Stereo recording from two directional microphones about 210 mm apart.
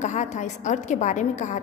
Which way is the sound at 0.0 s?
35° left (ahead or behind).